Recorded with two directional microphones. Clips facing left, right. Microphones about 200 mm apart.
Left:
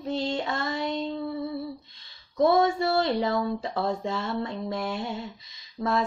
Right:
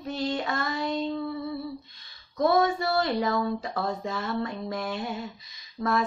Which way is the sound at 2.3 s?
25° left (ahead or behind).